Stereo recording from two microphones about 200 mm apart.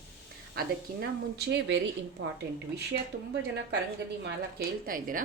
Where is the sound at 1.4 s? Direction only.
60° right (ahead or behind).